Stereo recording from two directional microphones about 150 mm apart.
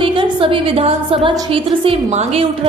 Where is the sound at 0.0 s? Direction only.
35° right (ahead or behind).